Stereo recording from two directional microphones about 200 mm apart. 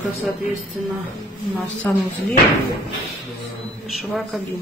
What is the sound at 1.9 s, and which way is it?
Speech, 10° left (ahead or behind).